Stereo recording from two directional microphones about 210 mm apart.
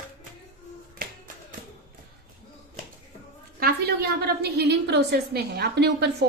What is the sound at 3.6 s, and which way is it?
A woman's voice, 50° right (ahead or behind).